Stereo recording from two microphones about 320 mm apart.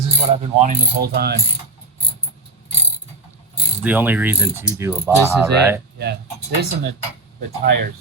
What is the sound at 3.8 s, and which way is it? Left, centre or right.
Mechanisms, centre.